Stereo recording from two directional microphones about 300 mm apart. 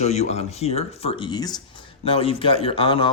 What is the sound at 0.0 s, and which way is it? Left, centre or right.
Speech, left.